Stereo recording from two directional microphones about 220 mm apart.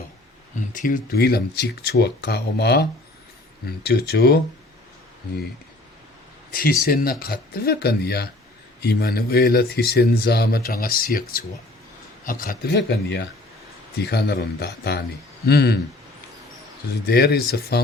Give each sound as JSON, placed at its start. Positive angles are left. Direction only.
{"t": 0.7, "sound": "speech", "side_deg": 35}
{"t": 6.5, "sound": "speech", "side_deg": 40}
{"t": 17.1, "sound": "speech", "side_deg": 45}